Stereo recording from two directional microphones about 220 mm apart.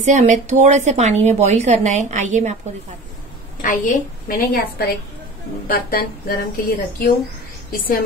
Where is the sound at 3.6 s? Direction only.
40° left (ahead or behind).